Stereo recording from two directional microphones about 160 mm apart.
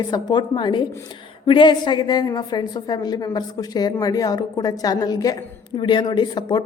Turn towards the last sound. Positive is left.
turn(degrees=25)  # may be behind; listen again after turning